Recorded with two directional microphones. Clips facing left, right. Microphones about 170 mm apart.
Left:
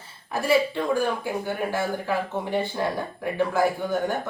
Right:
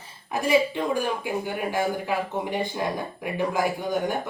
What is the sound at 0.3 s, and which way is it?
Speech, 15° right (ahead or behind).